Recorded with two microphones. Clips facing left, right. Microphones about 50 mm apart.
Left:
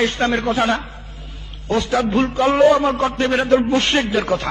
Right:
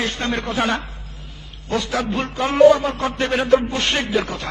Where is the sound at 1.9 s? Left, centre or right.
Centre.